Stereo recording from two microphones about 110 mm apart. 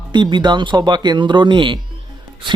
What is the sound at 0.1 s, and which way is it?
Speech, 45° right (ahead or behind).